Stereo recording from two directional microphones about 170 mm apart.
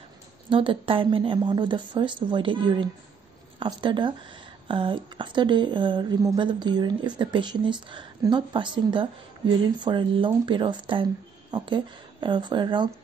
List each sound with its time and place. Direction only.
0.5 s speech: 30° right (ahead or behind)